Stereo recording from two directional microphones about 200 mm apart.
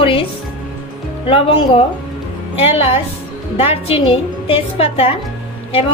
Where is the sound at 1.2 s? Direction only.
30° left (ahead or behind).